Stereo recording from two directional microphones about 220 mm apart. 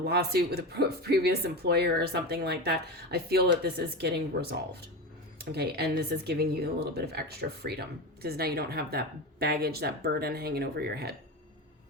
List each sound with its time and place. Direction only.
0.0 s speech: 45° right (ahead or behind)